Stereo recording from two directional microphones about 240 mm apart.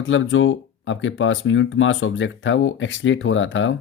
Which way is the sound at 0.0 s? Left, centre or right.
Left.